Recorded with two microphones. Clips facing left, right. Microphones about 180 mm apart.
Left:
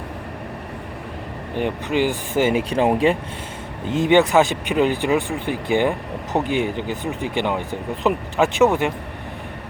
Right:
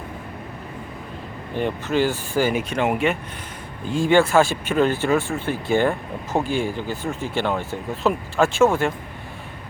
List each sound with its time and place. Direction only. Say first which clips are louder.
1.5 s speech: even; 15° left (ahead or behind); by 3.2 s 30° left (ahead or behind)
3.8 s speech: left 2 dB; 20° left (ahead or behind)